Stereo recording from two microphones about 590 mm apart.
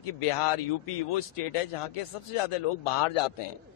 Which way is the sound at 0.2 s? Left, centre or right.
Left.